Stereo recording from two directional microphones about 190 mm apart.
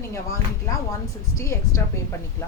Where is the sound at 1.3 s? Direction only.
15° left (ahead or behind).